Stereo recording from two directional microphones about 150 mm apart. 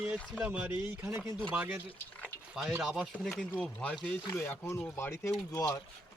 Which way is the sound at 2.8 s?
5° right (ahead or behind).